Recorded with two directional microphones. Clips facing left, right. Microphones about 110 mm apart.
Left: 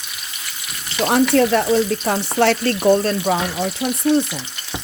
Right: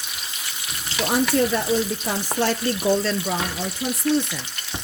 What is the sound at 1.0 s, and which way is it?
Speech, 80° left.